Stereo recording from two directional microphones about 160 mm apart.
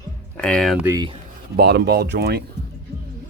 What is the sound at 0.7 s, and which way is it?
Speech, 10° right (ahead or behind).